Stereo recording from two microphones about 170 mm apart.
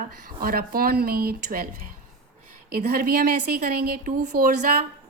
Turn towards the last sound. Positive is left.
turn(degrees=-50)  # may be behind; listen again after turning